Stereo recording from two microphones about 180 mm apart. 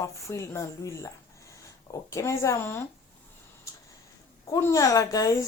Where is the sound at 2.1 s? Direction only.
15° left (ahead or behind).